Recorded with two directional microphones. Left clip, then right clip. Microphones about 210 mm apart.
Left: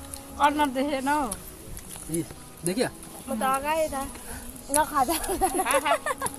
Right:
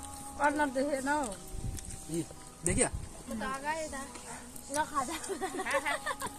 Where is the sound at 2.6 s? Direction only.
5° right (ahead or behind).